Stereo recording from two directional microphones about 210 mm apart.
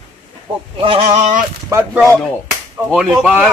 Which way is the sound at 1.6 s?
15° right (ahead or behind).